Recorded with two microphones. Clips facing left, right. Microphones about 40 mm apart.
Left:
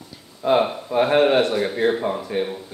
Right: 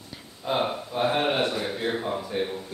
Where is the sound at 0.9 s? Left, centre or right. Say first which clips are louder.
Left 9 dB; left.